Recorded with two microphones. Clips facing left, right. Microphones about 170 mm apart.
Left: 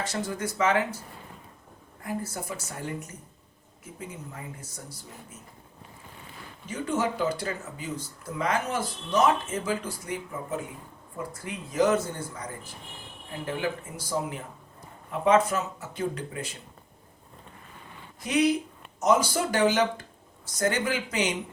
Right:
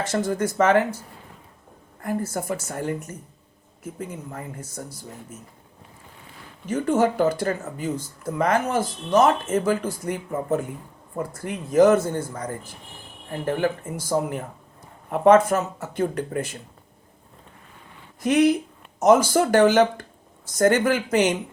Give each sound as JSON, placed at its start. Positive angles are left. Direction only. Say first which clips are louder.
{"t": 0.0, "sound": "speech", "louder": "right 7 dB", "side_deg": -50}
{"t": 2.0, "sound": "speech", "louder": "right 6 dB", "side_deg": -50}
{"t": 6.7, "sound": "speech", "louder": "right 8 dB", "side_deg": -50}
{"t": 18.2, "sound": "speech", "louder": "right 6 dB", "side_deg": -50}